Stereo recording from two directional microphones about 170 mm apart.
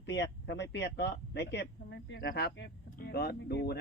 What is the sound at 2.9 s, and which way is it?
Speech, 70° left (ahead or behind).